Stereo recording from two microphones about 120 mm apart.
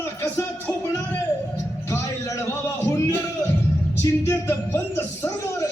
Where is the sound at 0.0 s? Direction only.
25° left (ahead or behind).